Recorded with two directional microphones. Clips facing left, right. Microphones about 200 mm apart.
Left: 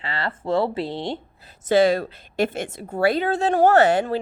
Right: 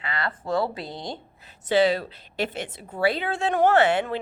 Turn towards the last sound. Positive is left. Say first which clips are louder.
# left 3 dB
turn(degrees=40)  # may be behind; listen again after turning